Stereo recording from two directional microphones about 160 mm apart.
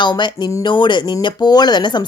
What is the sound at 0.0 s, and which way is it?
A woman's voice, 30° left (ahead or behind).